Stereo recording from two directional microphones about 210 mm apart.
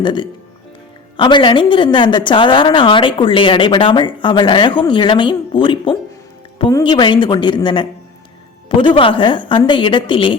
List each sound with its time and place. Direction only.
0.0 s a woman's voice: 20° left (ahead or behind)